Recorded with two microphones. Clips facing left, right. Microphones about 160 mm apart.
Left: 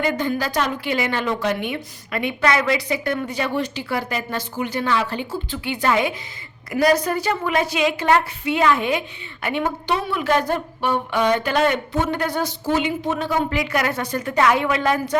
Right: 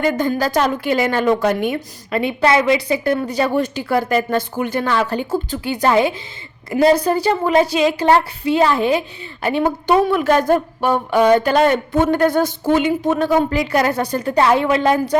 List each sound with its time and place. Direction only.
0.0 s a woman's voice: 45° right (ahead or behind)
2.0 s a woman's voice: 30° right (ahead or behind)